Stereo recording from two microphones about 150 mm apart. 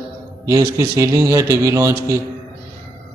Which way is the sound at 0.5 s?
20° right (ahead or behind).